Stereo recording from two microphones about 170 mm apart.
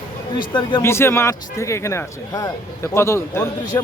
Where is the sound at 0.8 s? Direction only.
15° left (ahead or behind).